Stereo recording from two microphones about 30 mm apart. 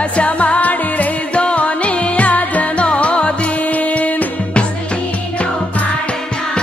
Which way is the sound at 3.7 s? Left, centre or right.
Left.